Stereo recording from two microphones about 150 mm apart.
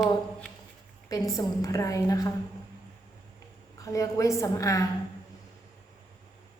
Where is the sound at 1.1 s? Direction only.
25° left (ahead or behind).